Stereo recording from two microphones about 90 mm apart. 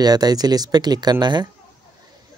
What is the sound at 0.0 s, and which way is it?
Speech, 45° right (ahead or behind).